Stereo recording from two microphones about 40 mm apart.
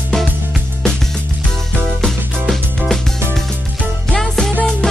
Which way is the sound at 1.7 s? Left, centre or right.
Centre.